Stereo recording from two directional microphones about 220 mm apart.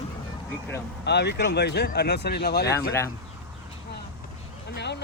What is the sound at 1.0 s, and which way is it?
Speech, 50° left (ahead or behind).